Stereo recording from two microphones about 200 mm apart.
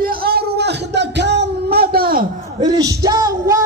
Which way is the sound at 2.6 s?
20° right (ahead or behind).